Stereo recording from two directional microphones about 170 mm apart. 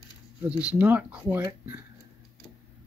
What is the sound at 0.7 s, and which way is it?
Speech, 10° right (ahead or behind).